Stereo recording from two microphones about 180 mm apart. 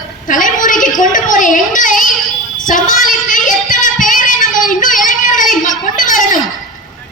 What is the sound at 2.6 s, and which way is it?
Child singing, 45° left (ahead or behind).